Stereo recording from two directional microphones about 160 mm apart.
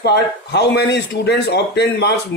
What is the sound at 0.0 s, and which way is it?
Speech, 90° left.